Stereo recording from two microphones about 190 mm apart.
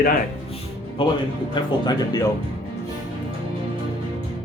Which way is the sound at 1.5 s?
20° left (ahead or behind).